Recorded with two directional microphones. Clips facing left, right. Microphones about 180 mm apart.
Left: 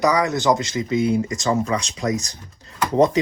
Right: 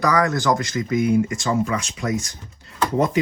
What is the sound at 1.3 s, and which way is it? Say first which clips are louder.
Speech: left 1 dB; 35° left (ahead or behind).